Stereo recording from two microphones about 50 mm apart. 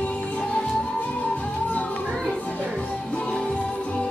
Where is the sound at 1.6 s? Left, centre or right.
Left.